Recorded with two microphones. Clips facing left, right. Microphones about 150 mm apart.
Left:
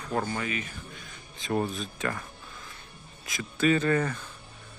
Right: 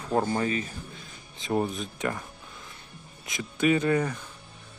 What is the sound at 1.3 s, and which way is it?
Speech, 20° right (ahead or behind).